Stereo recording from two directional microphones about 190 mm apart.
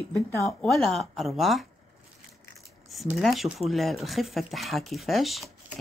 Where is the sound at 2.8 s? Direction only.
Centre (ahead or behind).